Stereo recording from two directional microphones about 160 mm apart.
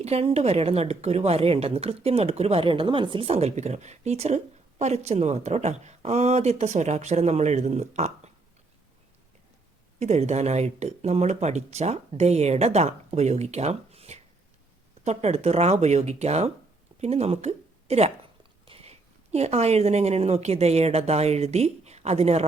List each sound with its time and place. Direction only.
0.0 s a woman's voice: 40° right (ahead or behind)
10.0 s a woman's voice: 45° right (ahead or behind)